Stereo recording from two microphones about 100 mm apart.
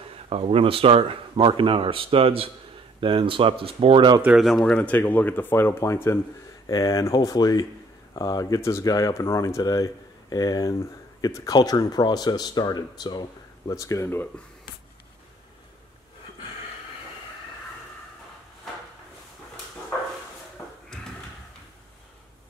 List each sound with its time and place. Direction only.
0.3 s speech: 80° right; by 4.2 s 55° right (ahead or behind)
4.3 s speech: centre (ahead or behind); by 14.2 s 30° left (ahead or behind)